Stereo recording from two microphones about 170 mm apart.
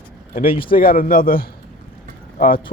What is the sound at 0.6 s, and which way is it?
Speech, 55° left (ahead or behind).